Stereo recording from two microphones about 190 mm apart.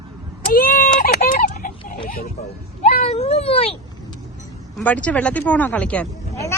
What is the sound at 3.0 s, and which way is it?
Speech, 35° left (ahead or behind).